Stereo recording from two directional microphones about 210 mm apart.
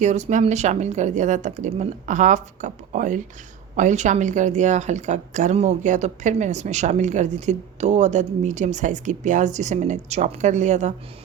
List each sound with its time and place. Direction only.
0.0 s a woman's voice: 35° right (ahead or behind)